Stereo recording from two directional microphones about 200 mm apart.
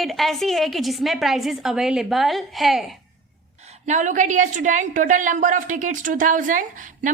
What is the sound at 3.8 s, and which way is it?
A woman's voice, 40° right (ahead or behind).